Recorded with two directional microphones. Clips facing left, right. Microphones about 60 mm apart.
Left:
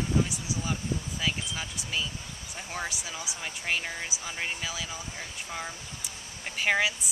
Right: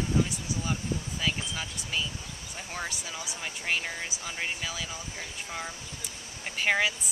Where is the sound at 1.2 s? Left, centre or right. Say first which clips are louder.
Right 1 dB; centre.